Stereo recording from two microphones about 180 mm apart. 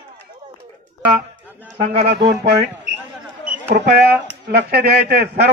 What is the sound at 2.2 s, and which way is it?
Speech, 60° right (ahead or behind).